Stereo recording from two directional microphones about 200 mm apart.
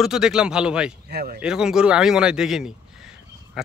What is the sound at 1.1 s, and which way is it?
Speech, 45° right (ahead or behind).